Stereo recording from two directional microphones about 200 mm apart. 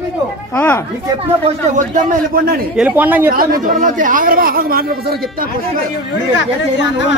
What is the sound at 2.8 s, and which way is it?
Speech, 10° right (ahead or behind).